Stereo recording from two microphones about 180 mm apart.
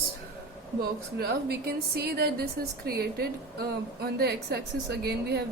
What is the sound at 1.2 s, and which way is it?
A woman's voice, 60° right (ahead or behind).